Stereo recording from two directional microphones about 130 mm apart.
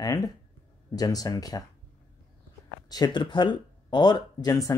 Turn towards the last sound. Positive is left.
turn(degrees=25)  # may be behind; listen again after turning